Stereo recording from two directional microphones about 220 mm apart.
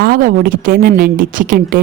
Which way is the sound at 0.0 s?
40° right (ahead or behind).